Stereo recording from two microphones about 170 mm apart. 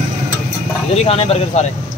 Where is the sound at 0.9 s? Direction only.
35° left (ahead or behind).